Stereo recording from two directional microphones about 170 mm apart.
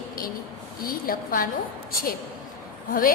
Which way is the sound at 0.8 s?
60° left (ahead or behind).